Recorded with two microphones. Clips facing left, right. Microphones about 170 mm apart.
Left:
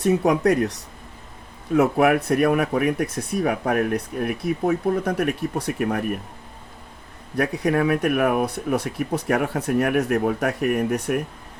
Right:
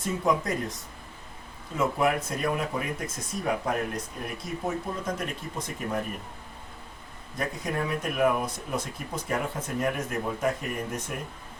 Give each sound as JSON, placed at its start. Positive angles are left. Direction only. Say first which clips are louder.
{"t": 0.0, "sound": "speech", "louder": "left 8 dB", "side_deg": 70}
{"t": 7.3, "sound": "speech", "louder": "left 10 dB", "side_deg": 65}